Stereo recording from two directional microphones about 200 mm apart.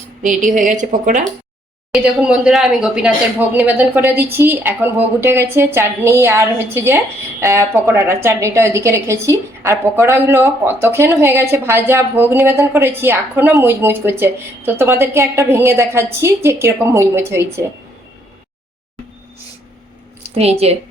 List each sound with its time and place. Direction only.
0.2 s a woman's voice: 40° right (ahead or behind)
1.9 s a woman's voice: 5° right (ahead or behind)
20.3 s a woman's voice: 30° right (ahead or behind)